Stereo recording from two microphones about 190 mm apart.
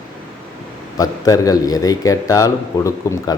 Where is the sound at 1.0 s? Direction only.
20° left (ahead or behind).